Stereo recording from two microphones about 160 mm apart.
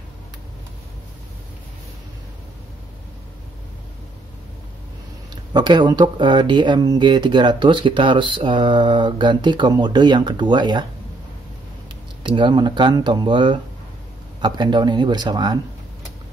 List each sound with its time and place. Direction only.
5.3 s speech: 25° right (ahead or behind)
12.2 s speech: 30° right (ahead or behind)